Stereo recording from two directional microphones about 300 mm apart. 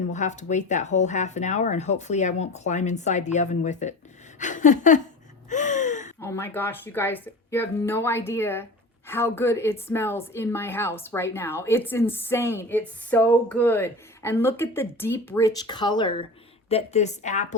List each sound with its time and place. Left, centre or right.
0.1 s speech: left
5.5 s gasp: left
6.1 s speech: centre; by 17.6 s left